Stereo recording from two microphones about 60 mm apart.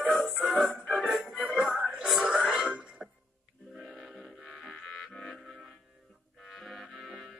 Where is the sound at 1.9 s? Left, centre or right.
Centre.